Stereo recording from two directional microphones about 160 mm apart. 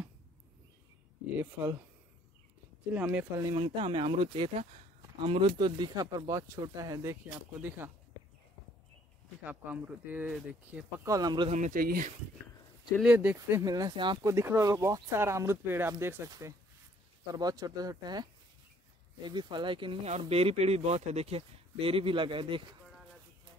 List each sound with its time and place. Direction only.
1.4 s speech: 15° right (ahead or behind)
2.9 s speech: 10° right (ahead or behind)
3.5 s speech: 30° right (ahead or behind); by 7.9 s 10° right (ahead or behind)
9.4 s speech: 10° right (ahead or behind)
11.1 s speech: 25° right (ahead or behind)
11.5 s speech: 55° right (ahead or behind)
13.0 s speech: 10° right (ahead or behind); by 14.3 s 30° right (ahead or behind)
14.3 s speech: 15° right (ahead or behind)